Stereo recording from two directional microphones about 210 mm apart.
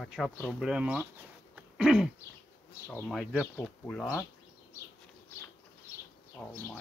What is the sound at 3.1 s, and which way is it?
Speech, 5° right (ahead or behind).